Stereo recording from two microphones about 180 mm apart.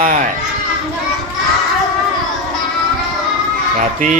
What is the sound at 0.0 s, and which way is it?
Goat, 50° right (ahead or behind).